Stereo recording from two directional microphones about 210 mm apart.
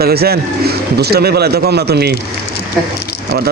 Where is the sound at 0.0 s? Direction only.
50° right (ahead or behind).